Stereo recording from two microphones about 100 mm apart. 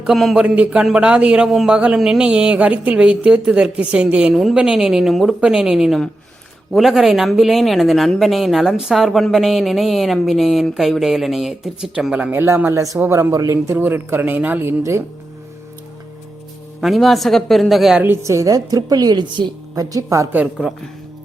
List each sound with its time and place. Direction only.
0.0 s speech: centre (ahead or behind)
0.4 s a man's voice: 10° right (ahead or behind)
12.3 s a man's voice: 20° right (ahead or behind)
12.7 s a woman's voice: 35° right (ahead or behind)
16.8 s speech: centre (ahead or behind)
18.0 s a woman's voice: 25° right (ahead or behind)
20.3 s a man's voice: 10° right (ahead or behind)